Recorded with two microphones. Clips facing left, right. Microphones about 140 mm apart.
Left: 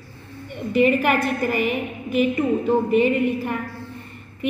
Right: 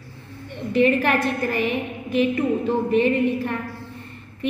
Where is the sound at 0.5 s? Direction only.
5° left (ahead or behind).